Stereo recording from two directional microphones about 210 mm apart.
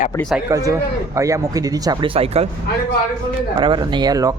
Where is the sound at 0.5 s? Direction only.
15° right (ahead or behind).